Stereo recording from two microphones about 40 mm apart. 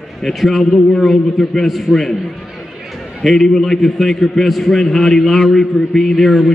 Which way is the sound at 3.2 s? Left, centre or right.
Centre.